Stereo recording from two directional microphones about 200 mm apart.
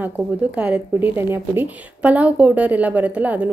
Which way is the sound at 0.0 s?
5° right (ahead or behind).